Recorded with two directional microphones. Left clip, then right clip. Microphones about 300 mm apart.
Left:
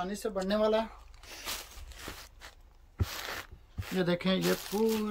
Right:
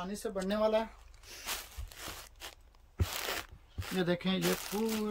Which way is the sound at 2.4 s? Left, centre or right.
Right.